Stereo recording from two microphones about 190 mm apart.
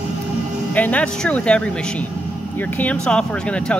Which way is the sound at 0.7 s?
10° left (ahead or behind).